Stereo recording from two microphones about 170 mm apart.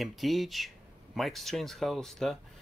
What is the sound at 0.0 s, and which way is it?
Speech, centre (ahead or behind).